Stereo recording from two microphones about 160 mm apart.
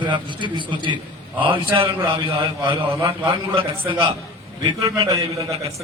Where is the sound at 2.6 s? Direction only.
30° right (ahead or behind).